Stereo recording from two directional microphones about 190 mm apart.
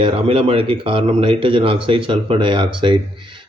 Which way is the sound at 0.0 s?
30° right (ahead or behind).